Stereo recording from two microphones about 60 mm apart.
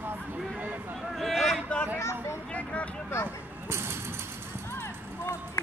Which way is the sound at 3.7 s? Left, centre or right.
Right.